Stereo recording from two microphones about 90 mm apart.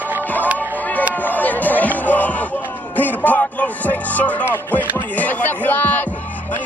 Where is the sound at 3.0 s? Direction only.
20° left (ahead or behind).